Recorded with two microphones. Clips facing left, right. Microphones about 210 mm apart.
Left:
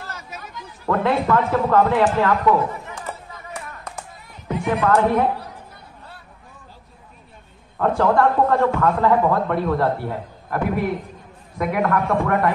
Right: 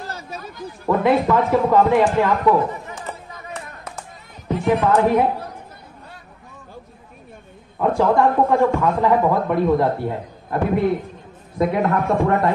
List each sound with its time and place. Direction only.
0.1 s a sound: 30° right (ahead or behind)
0.8 s speech: 15° right (ahead or behind)
4.6 s speech: 15° right (ahead or behind)
7.8 s a man's voice: 15° right (ahead or behind)